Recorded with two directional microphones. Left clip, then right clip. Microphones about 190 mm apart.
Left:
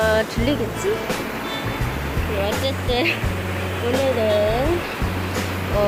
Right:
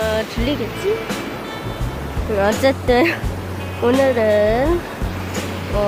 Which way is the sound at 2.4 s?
30° right (ahead or behind).